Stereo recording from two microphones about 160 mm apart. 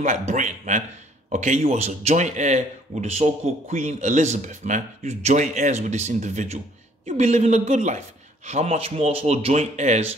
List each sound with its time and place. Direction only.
0.0 s a man's voice: 45° right (ahead or behind)